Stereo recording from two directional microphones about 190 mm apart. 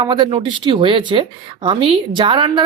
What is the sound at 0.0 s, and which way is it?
A woman's voice, 25° right (ahead or behind).